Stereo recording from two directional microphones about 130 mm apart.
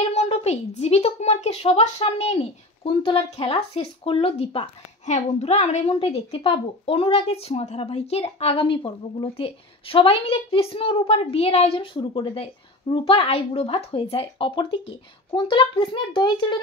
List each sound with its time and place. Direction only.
0.1 s a woman's voice: 55° left (ahead or behind)
5.9 s a woman's voice: 40° left (ahead or behind)